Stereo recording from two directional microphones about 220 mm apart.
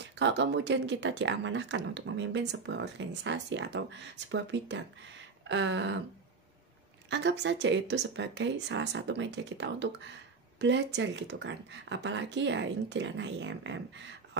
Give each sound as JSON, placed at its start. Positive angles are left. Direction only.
{"t": 0.0, "sound": "speech", "side_deg": -50}
{"t": 7.1, "sound": "speech", "side_deg": -55}